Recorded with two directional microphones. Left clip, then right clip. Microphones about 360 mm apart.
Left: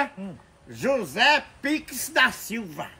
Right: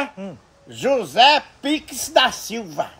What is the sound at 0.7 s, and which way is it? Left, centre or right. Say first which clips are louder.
Speech: right 7 dB; centre.